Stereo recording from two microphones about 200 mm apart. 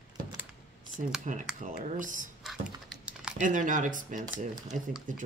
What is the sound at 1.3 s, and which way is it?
Speech, 35° right (ahead or behind).